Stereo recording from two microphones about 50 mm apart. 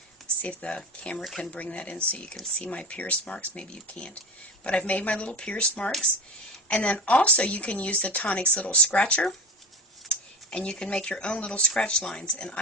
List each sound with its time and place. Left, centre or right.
0.4 s speech: left
10.1 s a sound: left
10.8 s speech: centre